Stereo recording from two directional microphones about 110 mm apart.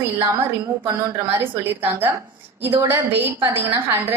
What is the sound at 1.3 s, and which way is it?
Speech, 15° right (ahead or behind).